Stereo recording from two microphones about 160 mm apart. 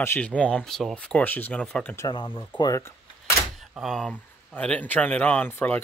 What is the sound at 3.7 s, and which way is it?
Speech, centre (ahead or behind).